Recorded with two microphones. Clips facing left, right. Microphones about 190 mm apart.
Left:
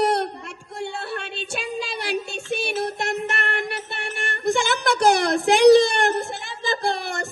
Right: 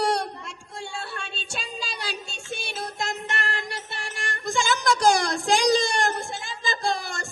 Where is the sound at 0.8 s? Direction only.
60° left (ahead or behind).